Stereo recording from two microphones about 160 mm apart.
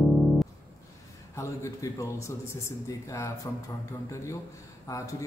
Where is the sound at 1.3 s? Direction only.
20° left (ahead or behind).